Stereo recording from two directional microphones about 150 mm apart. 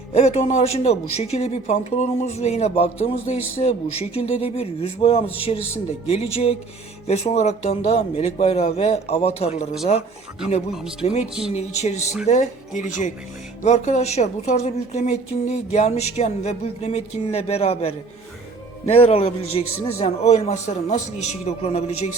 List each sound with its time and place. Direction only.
0.1 s speech: 45° left (ahead or behind)
11.0 s speech: 45° left (ahead or behind)